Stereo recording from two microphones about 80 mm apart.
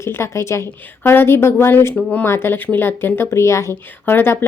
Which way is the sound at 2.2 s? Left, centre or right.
Left.